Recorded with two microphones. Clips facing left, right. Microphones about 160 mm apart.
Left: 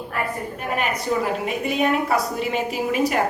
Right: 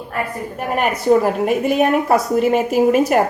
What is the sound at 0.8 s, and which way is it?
A woman's voice, 55° right (ahead or behind).